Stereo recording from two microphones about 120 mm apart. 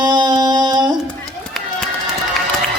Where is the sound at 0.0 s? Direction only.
35° right (ahead or behind).